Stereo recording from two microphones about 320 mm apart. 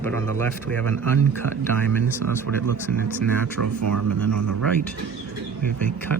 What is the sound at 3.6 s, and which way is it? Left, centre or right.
Speech, right.